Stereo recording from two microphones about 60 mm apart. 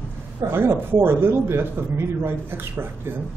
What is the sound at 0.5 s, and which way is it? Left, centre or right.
A man's voice, right.